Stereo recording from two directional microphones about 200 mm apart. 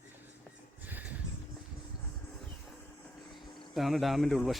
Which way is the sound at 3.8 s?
Centre (ahead or behind).